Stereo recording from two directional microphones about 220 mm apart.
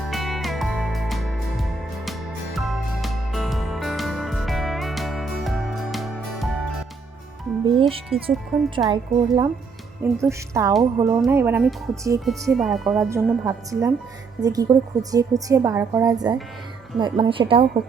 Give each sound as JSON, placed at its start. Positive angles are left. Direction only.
{"t": 0.1, "sound": "music", "side_deg": 0}
{"t": 7.6, "sound": "speech", "side_deg": -25}
{"t": 8.1, "sound": "speech", "side_deg": 0}
{"t": 8.9, "sound": "a woman's voice", "side_deg": -20}
{"t": 12.2, "sound": "speech", "side_deg": 0}
{"t": 13.1, "sound": "a woman's voice", "side_deg": -10}